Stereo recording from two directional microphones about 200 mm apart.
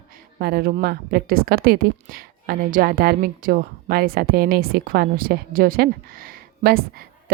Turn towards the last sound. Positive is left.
turn(degrees=-50)  # may be behind; listen again after turning